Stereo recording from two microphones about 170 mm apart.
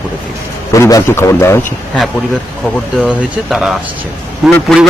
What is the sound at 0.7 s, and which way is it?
Speech, 15° left (ahead or behind).